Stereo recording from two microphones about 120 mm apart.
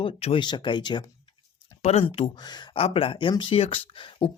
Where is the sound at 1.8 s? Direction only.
55° left (ahead or behind).